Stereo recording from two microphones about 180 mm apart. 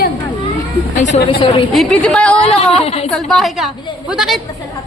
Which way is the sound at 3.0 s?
Centre (ahead or behind).